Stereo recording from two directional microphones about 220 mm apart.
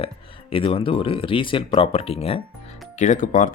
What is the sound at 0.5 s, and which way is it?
Speech, 25° left (ahead or behind).